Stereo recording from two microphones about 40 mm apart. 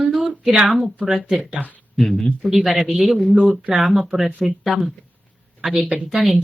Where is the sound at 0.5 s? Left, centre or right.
Centre.